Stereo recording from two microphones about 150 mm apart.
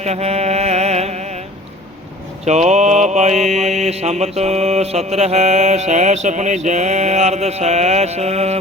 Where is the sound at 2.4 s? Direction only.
50° right (ahead or behind).